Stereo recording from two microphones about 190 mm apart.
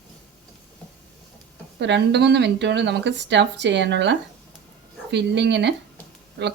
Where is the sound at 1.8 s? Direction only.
65° right (ahead or behind).